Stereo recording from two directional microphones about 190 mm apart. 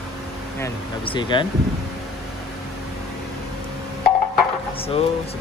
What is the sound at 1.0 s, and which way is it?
Speech, 25° left (ahead or behind).